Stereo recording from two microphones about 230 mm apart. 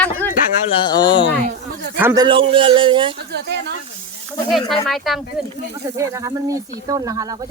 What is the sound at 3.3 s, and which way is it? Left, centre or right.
Speech, right.